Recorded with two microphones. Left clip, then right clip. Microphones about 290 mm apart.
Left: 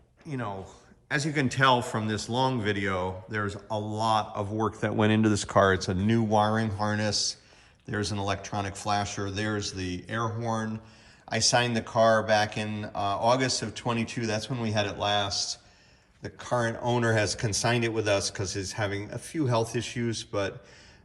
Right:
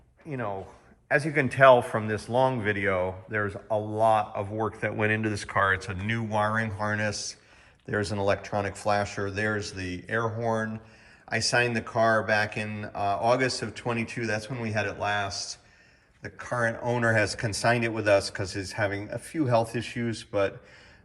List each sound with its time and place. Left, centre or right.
0.3 s speech: centre